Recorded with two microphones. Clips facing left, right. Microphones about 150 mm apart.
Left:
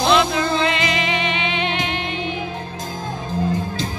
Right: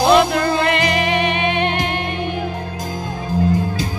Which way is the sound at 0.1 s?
50° right (ahead or behind).